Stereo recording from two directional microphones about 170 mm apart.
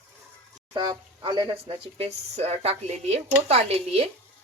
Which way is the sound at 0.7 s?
25° right (ahead or behind).